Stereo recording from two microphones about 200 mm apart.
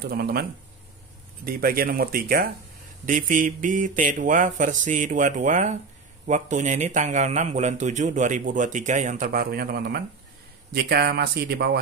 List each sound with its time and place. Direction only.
0.0 s speech: 50° right (ahead or behind)